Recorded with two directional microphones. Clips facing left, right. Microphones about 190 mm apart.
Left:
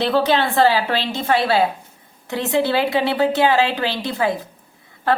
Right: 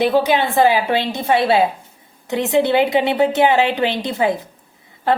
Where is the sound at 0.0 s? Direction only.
15° right (ahead or behind).